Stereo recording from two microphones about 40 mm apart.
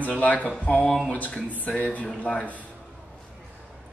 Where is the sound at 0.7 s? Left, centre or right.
Left.